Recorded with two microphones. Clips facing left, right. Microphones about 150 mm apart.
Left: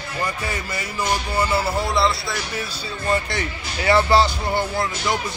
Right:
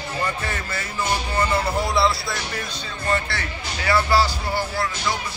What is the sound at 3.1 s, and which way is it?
Music, 20° left (ahead or behind).